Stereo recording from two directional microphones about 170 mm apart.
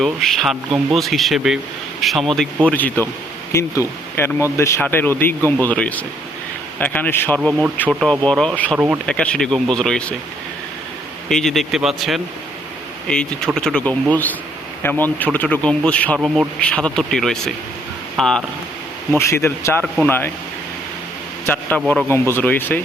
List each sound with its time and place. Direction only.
0.0 s speech: centre (ahead or behind)
2.6 s speech: 10° left (ahead or behind)
11.3 s speech: centre (ahead or behind)
19.1 s speech: 15° left (ahead or behind)
21.4 s a sound: 10° left (ahead or behind)
21.8 s speech: 10° left (ahead or behind)